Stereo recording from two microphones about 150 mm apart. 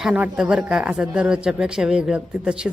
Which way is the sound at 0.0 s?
5° right (ahead or behind).